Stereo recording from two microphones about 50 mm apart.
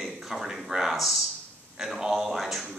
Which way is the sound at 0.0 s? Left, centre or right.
Centre.